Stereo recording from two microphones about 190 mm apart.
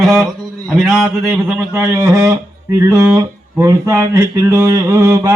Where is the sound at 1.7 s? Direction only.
10° right (ahead or behind).